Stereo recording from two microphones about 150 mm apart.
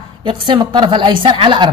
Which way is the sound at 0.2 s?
35° right (ahead or behind).